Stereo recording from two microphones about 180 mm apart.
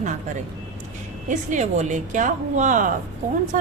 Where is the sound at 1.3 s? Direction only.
45° right (ahead or behind).